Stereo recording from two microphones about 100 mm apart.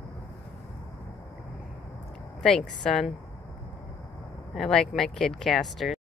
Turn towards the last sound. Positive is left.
turn(degrees=0)  # may be behind; listen again after turning